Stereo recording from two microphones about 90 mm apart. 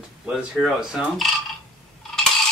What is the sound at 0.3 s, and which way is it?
Speech, 5° right (ahead or behind).